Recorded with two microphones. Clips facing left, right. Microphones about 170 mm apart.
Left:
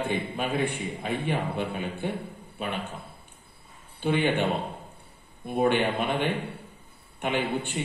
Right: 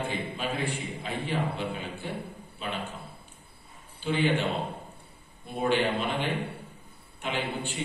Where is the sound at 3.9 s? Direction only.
55° left (ahead or behind).